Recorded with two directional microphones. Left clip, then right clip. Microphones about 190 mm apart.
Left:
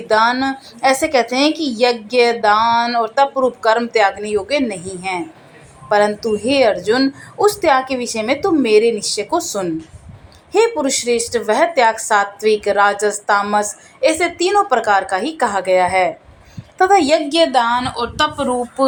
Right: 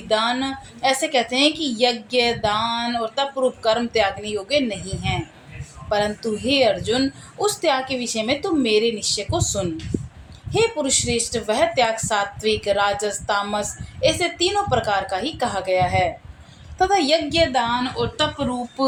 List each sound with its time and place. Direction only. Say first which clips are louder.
0.1 s a woman's voice: left 7 dB; 15° left (ahead or behind)
17.5 s speech: left 6 dB; 40° left (ahead or behind)